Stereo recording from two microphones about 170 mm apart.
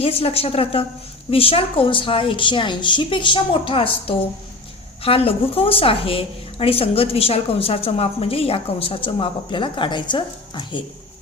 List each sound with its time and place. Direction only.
0.0 s a woman's voice: 35° left (ahead or behind)